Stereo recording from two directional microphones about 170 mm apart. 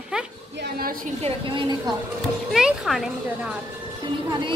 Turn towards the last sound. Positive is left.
turn(degrees=-30)  # may be behind; listen again after turning